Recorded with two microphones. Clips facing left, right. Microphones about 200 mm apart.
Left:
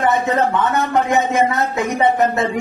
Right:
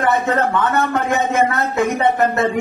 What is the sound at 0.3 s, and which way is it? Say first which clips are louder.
Music: even; 15° left (ahead or behind).